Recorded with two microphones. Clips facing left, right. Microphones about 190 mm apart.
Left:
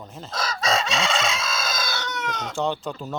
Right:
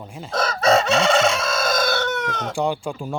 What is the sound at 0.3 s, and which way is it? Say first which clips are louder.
Chicken: right 7 dB; 60° right (ahead or behind).